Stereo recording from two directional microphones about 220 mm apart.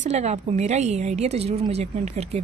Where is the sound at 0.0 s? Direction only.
30° right (ahead or behind).